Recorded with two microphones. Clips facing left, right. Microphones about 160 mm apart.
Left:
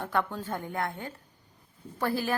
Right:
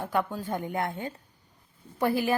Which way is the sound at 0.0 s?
10° right (ahead or behind).